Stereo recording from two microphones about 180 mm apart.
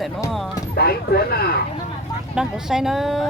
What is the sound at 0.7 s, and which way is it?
Speech, 60° left (ahead or behind).